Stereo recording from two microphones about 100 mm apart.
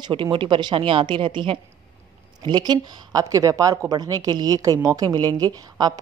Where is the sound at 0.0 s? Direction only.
60° right (ahead or behind).